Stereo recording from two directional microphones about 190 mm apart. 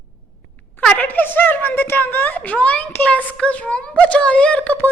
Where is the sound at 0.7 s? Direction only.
5° left (ahead or behind).